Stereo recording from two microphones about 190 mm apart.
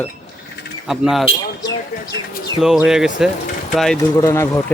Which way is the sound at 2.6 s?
Centre (ahead or behind).